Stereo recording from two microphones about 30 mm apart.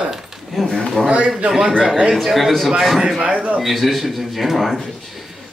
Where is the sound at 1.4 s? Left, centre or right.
Centre.